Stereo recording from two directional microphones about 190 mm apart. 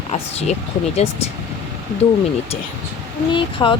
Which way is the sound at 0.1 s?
35° left (ahead or behind).